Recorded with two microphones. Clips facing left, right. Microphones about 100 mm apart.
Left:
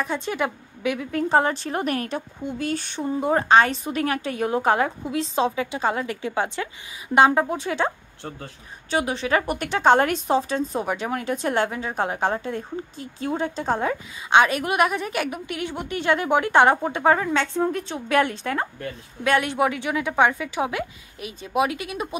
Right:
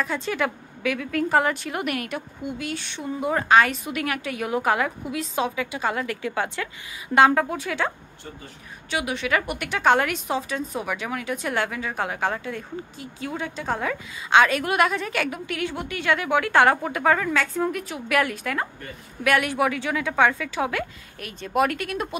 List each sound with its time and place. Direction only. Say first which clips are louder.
0.0 s a woman's voice: even; 20° left (ahead or behind)
8.9 s a woman's voice: left 2 dB; 35° left (ahead or behind); by 22.1 s 10° left (ahead or behind)